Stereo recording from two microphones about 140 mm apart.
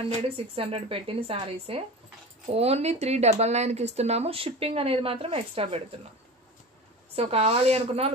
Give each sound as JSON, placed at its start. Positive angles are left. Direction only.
{"t": 0.6, "sound": "speech", "side_deg": -40}
{"t": 7.2, "sound": "speech", "side_deg": -45}